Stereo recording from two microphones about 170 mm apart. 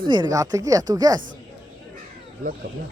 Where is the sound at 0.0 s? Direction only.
25° right (ahead or behind).